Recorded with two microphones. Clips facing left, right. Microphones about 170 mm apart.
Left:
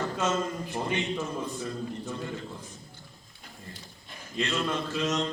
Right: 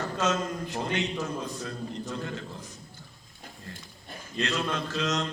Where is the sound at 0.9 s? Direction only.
70° right (ahead or behind).